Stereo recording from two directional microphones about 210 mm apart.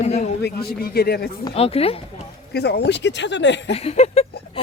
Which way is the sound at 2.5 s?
50° left (ahead or behind).